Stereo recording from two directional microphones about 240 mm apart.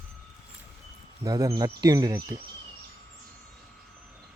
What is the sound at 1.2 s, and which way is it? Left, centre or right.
Speech, centre.